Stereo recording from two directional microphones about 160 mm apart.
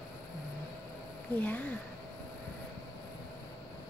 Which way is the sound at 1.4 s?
10° left (ahead or behind).